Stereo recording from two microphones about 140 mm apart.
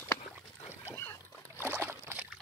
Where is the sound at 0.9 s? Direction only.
15° left (ahead or behind).